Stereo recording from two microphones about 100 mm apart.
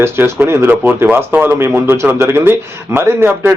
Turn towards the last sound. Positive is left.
turn(degrees=-20)  # may be behind; listen again after turning